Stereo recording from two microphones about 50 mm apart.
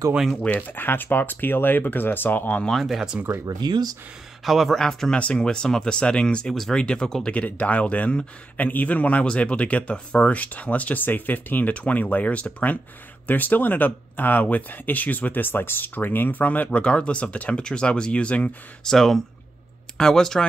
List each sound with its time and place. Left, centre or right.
0.4 s speech: left
2.7 s speech: centre
4.5 s speech: centre
4.7 s speech: centre
7.2 s speech: left
16.8 s speech: left
18.9 s speech: centre